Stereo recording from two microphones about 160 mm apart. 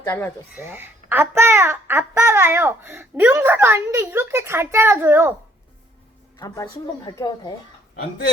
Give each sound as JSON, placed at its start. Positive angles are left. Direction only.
{"t": 0.5, "sound": "a child's voice", "side_deg": -15}
{"t": 6.3, "sound": "a woman's voice", "side_deg": 25}